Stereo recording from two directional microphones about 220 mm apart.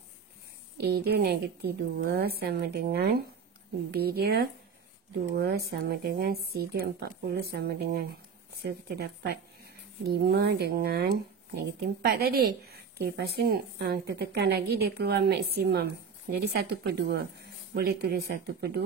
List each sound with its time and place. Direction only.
0.7 s speech: 45° right (ahead or behind)